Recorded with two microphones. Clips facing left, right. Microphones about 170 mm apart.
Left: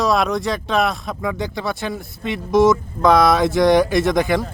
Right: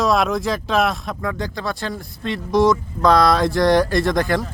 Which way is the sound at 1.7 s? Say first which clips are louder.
Left 2 dB; 5° left (ahead or behind).